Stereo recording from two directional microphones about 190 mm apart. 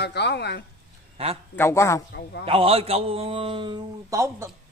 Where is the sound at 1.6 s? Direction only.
15° left (ahead or behind).